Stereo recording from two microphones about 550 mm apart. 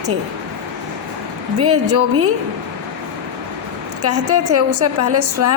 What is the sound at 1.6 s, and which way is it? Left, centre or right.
Speech, right.